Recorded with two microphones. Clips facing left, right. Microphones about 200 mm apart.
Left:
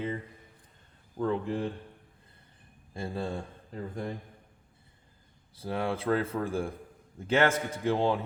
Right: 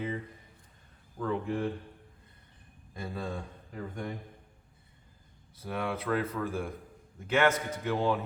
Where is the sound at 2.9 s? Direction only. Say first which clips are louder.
Left 3 dB; 30° left (ahead or behind).